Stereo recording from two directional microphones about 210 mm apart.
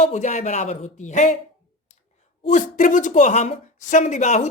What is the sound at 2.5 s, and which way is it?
A woman's voice, 40° left (ahead or behind).